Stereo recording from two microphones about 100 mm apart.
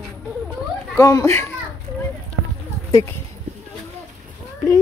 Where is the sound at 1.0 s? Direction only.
35° left (ahead or behind).